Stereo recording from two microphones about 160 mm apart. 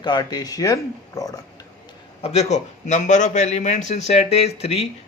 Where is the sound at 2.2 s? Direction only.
40° left (ahead or behind).